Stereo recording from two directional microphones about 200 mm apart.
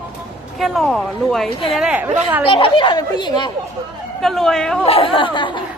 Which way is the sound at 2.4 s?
25° left (ahead or behind).